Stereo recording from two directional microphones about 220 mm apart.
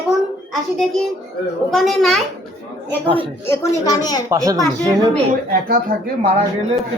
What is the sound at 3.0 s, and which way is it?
Speech, 25° right (ahead or behind).